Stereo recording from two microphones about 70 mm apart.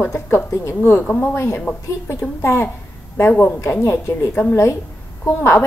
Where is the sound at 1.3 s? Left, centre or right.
Left.